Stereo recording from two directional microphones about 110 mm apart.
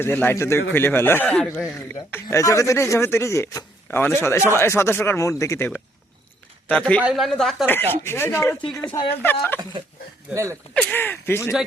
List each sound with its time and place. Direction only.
0.0 s speech: 20° left (ahead or behind)
2.3 s speech: 30° left (ahead or behind)
6.7 s speech: 10° left (ahead or behind)
7.0 s speech: 5° right (ahead or behind)
7.7 s speech: 20° left (ahead or behind)
10.3 s speech: 25° right (ahead or behind)
10.9 s speech: 20° left (ahead or behind)